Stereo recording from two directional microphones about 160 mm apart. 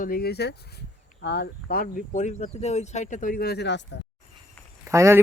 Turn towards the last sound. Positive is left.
turn(degrees=-15)  # may be behind; listen again after turning